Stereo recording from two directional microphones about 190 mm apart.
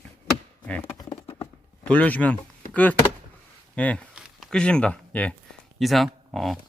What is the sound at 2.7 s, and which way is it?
Speech, 10° left (ahead or behind).